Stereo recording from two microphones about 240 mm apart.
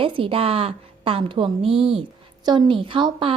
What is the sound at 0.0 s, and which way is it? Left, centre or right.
A woman's voice, right.